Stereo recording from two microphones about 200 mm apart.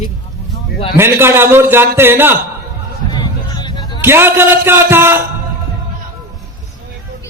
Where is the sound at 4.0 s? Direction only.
10° right (ahead or behind).